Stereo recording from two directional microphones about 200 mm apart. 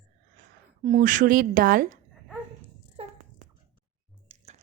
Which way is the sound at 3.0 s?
30° right (ahead or behind).